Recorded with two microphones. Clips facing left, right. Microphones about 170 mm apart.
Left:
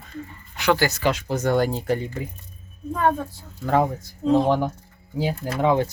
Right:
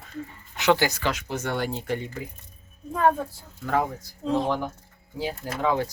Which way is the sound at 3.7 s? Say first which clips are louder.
Left 5 dB; 30° left (ahead or behind).